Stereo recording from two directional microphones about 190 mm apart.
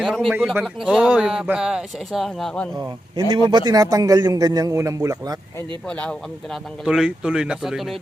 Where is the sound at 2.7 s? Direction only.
20° right (ahead or behind).